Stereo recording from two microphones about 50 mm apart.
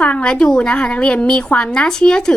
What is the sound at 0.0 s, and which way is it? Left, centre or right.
A woman's voice, left.